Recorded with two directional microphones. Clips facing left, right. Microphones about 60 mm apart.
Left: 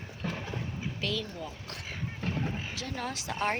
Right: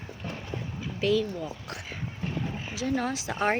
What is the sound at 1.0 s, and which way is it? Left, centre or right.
Speech, centre.